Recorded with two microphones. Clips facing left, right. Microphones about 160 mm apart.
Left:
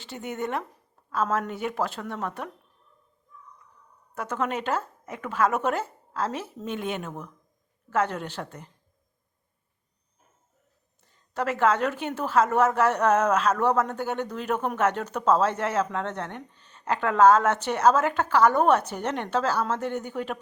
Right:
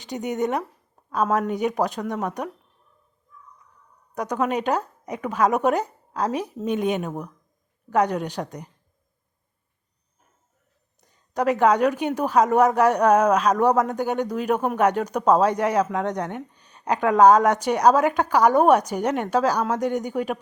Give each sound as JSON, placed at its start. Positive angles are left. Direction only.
{"t": 0.0, "sound": "a woman's voice", "side_deg": -15}
{"t": 4.1, "sound": "a woman's voice", "side_deg": -15}
{"t": 11.0, "sound": "a woman's voice", "side_deg": -15}